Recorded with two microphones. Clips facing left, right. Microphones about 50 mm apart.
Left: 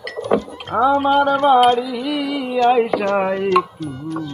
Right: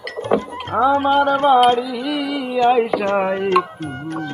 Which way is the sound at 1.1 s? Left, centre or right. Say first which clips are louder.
Even; right.